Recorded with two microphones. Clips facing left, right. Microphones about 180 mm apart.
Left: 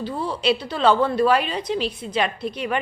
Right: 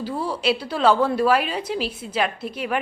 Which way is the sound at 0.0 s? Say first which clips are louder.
Even; 10° right (ahead or behind).